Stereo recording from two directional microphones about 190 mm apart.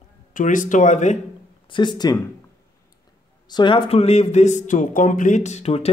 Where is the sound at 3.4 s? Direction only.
25° left (ahead or behind).